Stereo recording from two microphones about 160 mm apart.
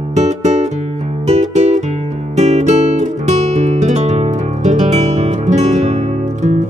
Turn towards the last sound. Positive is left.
turn(degrees=-45)  # may be behind; listen again after turning